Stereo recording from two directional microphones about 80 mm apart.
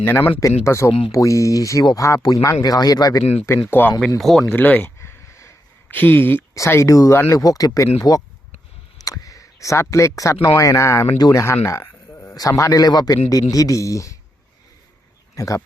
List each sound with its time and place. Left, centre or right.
0.0 s speech: left
0.3 s a man's voice: left
3.7 s speech: left
4.2 s speech: centre
4.5 s a sound: left
5.9 s speech: left
6.5 s a man's voice: left
9.0 s a sound: left
10.2 s a man's voice: left
15.4 s a man's voice: left